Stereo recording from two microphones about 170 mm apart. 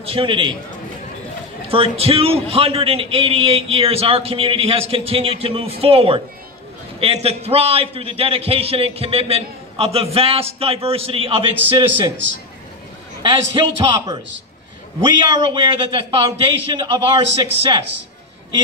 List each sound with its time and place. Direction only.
0.0 s a man's voice: 30° right (ahead or behind)
1.7 s a man's voice: 35° right (ahead or behind)
13.2 s a man's voice: 30° right (ahead or behind)